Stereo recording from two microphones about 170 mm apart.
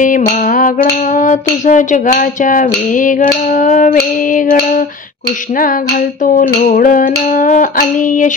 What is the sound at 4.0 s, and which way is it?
Music, 50° left (ahead or behind).